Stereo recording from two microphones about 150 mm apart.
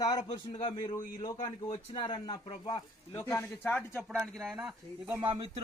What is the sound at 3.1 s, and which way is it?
Speech, 15° left (ahead or behind).